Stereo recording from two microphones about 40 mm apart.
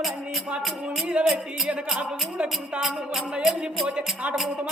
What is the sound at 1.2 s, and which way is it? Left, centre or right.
Music, right.